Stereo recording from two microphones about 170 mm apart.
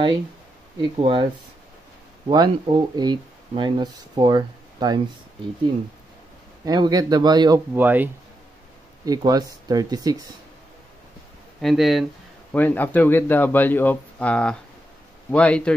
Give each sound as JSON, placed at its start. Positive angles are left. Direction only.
{"t": 0.7, "sound": "speech", "side_deg": -30}
{"t": 6.6, "sound": "speech", "side_deg": -25}
{"t": 7.7, "sound": "speech", "side_deg": -10}
{"t": 9.0, "sound": "speech", "side_deg": -20}
{"t": 11.6, "sound": "speech", "side_deg": 0}
{"t": 12.5, "sound": "speech", "side_deg": 10}